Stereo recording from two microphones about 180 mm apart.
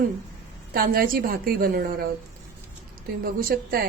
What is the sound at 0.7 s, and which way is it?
A woman's voice, 55° right (ahead or behind).